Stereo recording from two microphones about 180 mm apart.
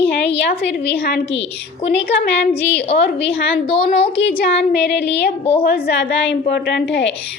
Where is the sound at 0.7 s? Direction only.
70° left (ahead or behind).